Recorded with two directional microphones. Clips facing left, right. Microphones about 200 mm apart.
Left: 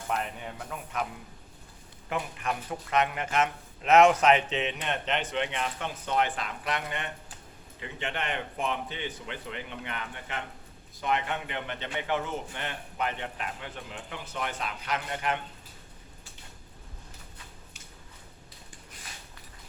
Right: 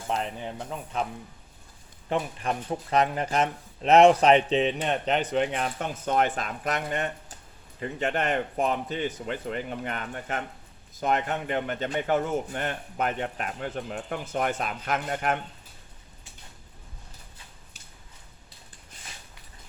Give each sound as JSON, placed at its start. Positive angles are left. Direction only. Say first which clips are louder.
{"t": 0.1, "sound": "speech", "louder": "right 3 dB", "side_deg": -30}
{"t": 2.0, "sound": "a man's voice", "louder": "right 4 dB", "side_deg": -30}